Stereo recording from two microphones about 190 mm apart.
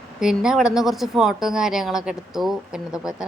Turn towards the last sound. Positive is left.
turn(degrees=-5)  # may be behind; listen again after turning